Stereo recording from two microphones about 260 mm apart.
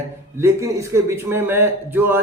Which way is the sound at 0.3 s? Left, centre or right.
Centre.